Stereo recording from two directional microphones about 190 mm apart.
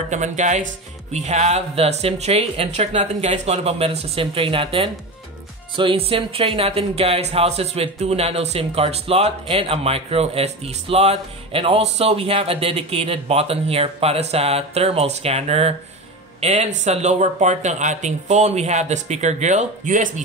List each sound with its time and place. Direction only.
0.1 s speech: 40° right (ahead or behind)